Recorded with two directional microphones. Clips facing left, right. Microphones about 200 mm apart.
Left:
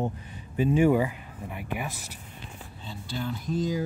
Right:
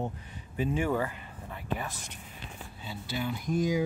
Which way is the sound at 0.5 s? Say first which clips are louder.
Left 7 dB; 15° left (ahead or behind).